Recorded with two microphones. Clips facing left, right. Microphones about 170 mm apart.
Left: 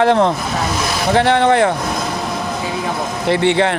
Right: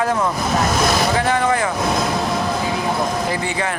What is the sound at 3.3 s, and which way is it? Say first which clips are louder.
Speech: left 8 dB; 70° left (ahead or behind).